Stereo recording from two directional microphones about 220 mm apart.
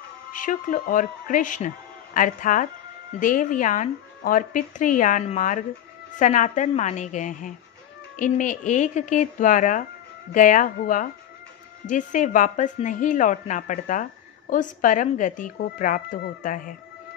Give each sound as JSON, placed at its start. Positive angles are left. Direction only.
{"t": 0.3, "sound": "speech", "side_deg": 35}